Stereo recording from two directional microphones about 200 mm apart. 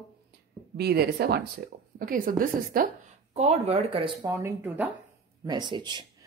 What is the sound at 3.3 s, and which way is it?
Speech, 35° right (ahead or behind).